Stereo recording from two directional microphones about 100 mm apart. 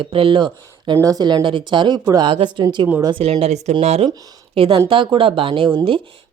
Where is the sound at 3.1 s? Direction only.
75° right (ahead or behind).